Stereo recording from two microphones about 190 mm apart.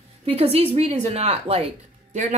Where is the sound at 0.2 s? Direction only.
30° right (ahead or behind).